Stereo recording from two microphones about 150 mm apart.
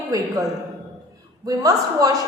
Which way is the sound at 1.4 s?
25° right (ahead or behind).